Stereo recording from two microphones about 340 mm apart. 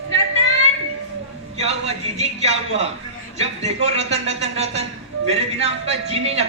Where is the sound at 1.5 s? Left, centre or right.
Centre.